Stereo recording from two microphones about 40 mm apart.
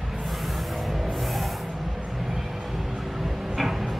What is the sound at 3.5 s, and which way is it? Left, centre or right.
Music, centre.